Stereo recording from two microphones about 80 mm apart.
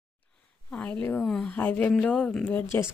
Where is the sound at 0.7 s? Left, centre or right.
Centre.